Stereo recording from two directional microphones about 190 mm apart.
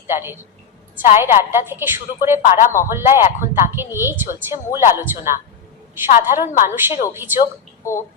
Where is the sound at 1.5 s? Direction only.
10° right (ahead or behind).